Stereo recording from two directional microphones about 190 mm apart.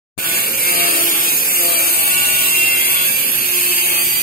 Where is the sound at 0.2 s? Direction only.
50° left (ahead or behind).